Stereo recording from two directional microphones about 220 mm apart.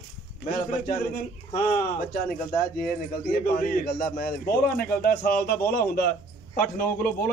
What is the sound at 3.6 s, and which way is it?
A man's voice, 45° left (ahead or behind).